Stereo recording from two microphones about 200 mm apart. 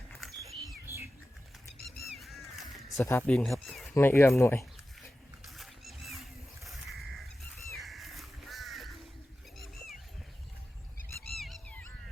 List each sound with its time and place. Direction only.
0.1 s a sound: centre (ahead or behind)
2.1 s honk: centre (ahead or behind)
2.6 s crow: centre (ahead or behind)
3.0 s speech: 10° left (ahead or behind)
3.9 s speech: 10° left (ahead or behind)
5.5 s wild animals: centre (ahead or behind)
6.7 s bird: centre (ahead or behind)
7.8 s crow: centre (ahead or behind)
9.6 s a sound: centre (ahead or behind)
11.3 s goose: centre (ahead or behind)